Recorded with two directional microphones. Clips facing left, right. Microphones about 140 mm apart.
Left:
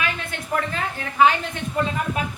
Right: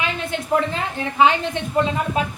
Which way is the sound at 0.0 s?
20° right (ahead or behind).